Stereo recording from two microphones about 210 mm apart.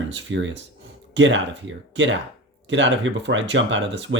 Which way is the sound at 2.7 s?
60° right (ahead or behind).